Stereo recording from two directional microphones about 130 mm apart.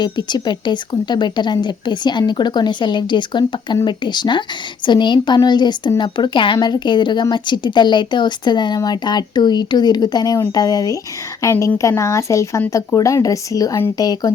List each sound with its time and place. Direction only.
0.0 s a woman's voice: 35° left (ahead or behind)